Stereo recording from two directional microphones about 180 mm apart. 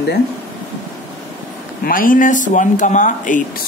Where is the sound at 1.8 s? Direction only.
50° left (ahead or behind).